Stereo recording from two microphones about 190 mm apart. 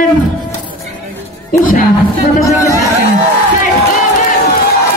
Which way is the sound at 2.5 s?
15° left (ahead or behind).